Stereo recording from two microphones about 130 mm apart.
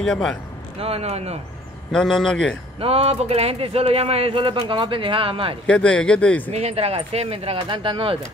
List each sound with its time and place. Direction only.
0.0 s a man's voice: 5° left (ahead or behind)
0.7 s speech: 50° right (ahead or behind)
1.9 s a man's voice: 5° left (ahead or behind)
2.8 s speech: 50° right (ahead or behind)
5.7 s speech: 10° left (ahead or behind)
6.5 s speech: 55° right (ahead or behind)
7.6 s speech: 40° right (ahead or behind)